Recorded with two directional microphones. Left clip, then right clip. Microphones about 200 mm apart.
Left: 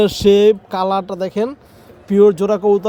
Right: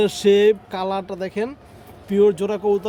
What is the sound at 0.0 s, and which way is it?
Speech, 25° left (ahead or behind).